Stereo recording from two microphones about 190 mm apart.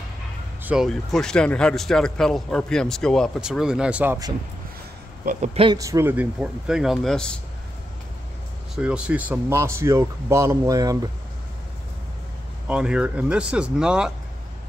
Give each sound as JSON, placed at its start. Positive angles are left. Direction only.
{"t": 0.7, "sound": "speech", "side_deg": 0}
{"t": 5.2, "sound": "speech", "side_deg": -35}
{"t": 5.8, "sound": "speech", "side_deg": -15}
{"t": 8.7, "sound": "speech", "side_deg": -5}
{"t": 12.6, "sound": "speech", "side_deg": -5}